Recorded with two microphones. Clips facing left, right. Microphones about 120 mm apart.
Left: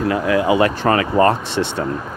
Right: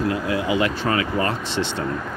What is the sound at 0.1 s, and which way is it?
Speech, 80° left.